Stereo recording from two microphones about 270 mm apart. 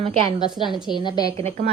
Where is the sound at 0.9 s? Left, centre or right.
Centre.